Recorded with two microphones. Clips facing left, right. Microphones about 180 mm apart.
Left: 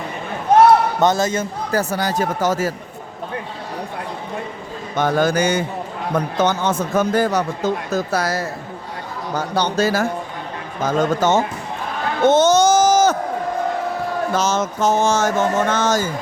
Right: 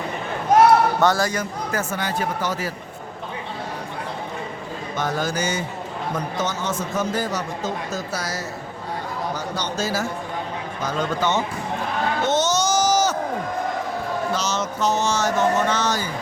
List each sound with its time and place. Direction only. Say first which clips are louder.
0.9 s a man's voice: left 3 dB; 20° left (ahead or behind)
1.8 s a man's voice: left 5 dB; 40° left (ahead or behind)
4.9 s a man's voice: left 8 dB; 60° left (ahead or behind)
9.6 s a man's voice: left 9 dB; 60° left (ahead or behind)
10.8 s speech: left 7 dB; 45° left (ahead or behind)
12.2 s a sound: left 10 dB; 55° left (ahead or behind)
14.3 s speech: left 5 dB; 50° left (ahead or behind)